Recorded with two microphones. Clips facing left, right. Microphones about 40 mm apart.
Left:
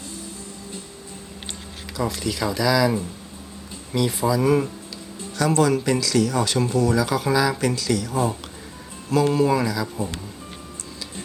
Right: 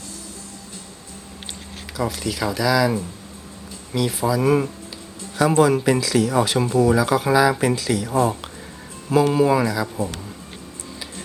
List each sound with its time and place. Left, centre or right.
2.0 s speech: centre